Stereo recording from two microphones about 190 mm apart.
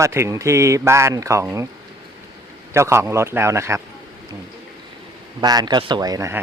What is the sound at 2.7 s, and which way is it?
Speech, 15° right (ahead or behind).